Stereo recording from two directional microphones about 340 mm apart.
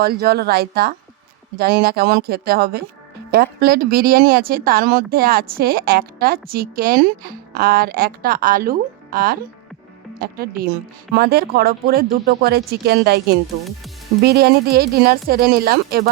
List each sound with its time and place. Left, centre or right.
0.0 s a woman's voice: right